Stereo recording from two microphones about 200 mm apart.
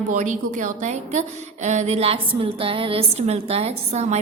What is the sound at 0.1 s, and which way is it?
A woman's voice, 40° right (ahead or behind).